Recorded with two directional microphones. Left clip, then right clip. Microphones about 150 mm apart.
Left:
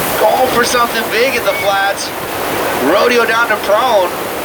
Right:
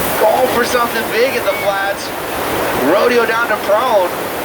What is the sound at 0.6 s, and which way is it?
Speech, 50° left (ahead or behind).